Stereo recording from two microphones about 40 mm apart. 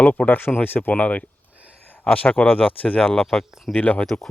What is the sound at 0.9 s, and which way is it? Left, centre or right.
Speech, left.